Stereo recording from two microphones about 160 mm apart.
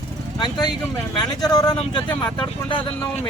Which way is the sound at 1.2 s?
25° left (ahead or behind).